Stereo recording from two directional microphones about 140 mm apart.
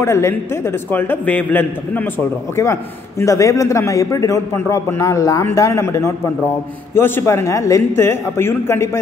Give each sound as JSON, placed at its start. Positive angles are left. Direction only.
{"t": 0.0, "sound": "a man's voice", "side_deg": 20}